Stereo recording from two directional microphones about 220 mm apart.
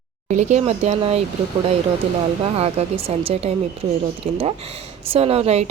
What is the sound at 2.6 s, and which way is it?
Speech, 25° right (ahead or behind).